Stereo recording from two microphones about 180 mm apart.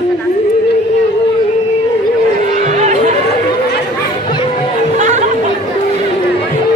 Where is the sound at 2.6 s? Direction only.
40° right (ahead or behind).